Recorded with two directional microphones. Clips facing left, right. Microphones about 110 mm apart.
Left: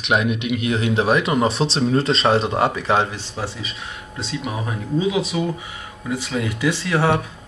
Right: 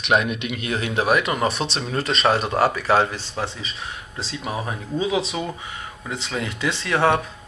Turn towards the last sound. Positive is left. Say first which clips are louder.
# even
turn(degrees=10)  # may be behind; listen again after turning